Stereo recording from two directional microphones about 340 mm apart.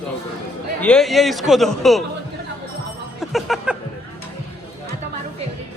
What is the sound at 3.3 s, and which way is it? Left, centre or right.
Speech, centre.